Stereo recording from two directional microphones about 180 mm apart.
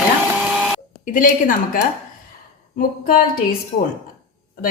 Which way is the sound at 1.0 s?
45° left (ahead or behind).